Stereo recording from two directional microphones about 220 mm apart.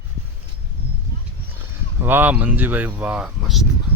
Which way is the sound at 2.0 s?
10° right (ahead or behind).